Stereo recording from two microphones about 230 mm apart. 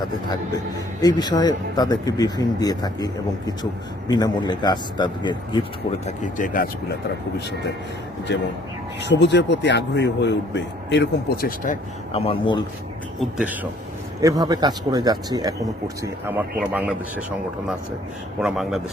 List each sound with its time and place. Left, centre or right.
1.0 s a man's voice: centre
6.1 s speech: left
8.3 s a man's voice: left
13.1 s speech: centre
18.3 s speech: centre